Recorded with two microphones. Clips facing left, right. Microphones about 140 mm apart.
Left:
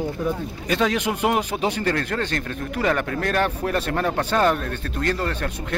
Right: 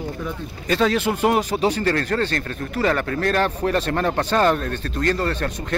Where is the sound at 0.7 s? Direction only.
10° left (ahead or behind).